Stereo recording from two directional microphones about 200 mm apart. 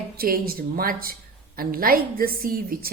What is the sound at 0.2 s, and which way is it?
Speech, 50° right (ahead or behind).